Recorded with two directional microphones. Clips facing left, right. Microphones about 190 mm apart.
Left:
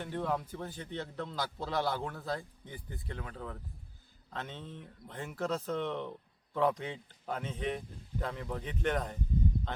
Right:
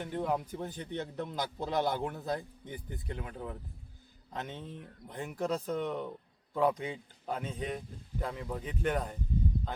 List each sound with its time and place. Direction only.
0.0 s speech: 15° right (ahead or behind)